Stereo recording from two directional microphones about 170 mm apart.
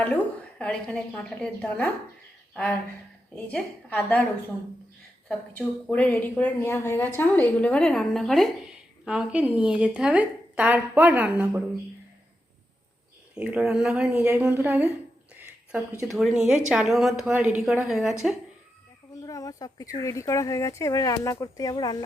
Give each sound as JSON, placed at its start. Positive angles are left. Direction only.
{"t": 0.6, "sound": "speech", "side_deg": 5}
{"t": 3.3, "sound": "speech", "side_deg": 5}
{"t": 5.5, "sound": "a woman's voice", "side_deg": 10}
{"t": 13.3, "sound": "a woman's voice", "side_deg": -5}
{"t": 15.4, "sound": "a sound", "side_deg": -15}
{"t": 16.0, "sound": "speech", "side_deg": 0}
{"t": 19.2, "sound": "speech", "side_deg": 20}